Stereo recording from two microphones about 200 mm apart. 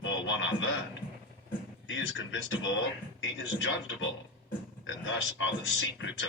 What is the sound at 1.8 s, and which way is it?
A man's voice, 70° left (ahead or behind).